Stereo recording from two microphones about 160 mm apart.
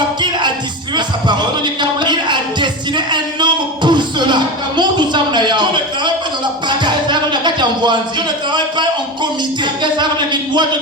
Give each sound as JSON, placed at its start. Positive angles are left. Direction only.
{"t": 0.9, "sound": "music", "side_deg": -30}
{"t": 9.8, "sound": "speech", "side_deg": -30}